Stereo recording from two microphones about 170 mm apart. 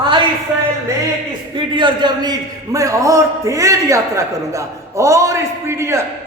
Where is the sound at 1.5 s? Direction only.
25° right (ahead or behind).